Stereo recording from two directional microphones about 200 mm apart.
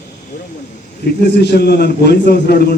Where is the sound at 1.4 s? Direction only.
55° left (ahead or behind).